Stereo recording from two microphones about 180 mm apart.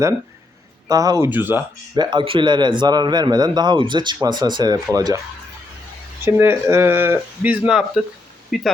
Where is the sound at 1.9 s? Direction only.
25° right (ahead or behind).